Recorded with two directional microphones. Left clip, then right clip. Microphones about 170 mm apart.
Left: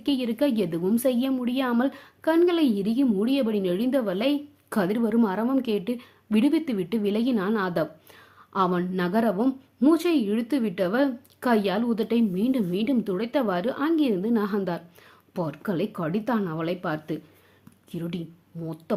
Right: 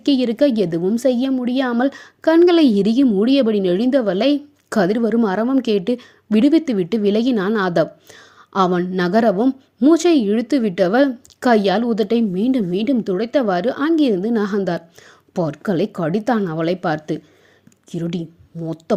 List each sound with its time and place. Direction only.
0.0 s a woman's voice: 35° right (ahead or behind)